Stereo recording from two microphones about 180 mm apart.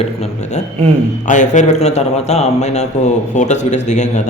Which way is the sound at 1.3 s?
45° left (ahead or behind).